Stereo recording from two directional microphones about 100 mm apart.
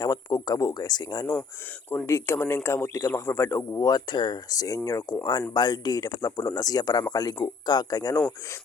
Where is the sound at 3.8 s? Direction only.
45° left (ahead or behind).